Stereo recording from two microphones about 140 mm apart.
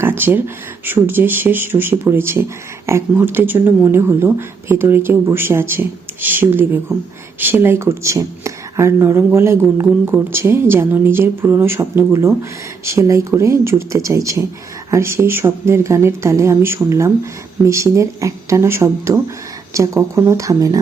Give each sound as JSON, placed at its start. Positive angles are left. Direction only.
{"t": 0.0, "sound": "speech", "side_deg": -15}